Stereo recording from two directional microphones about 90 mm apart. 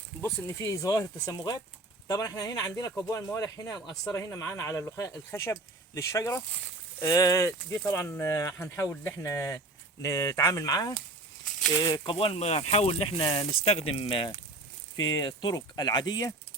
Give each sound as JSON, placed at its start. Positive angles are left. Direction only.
{"t": 0.2, "sound": "speech", "side_deg": 30}
{"t": 12.0, "sound": "speech", "side_deg": 90}
{"t": 15.1, "sound": "speech", "side_deg": 40}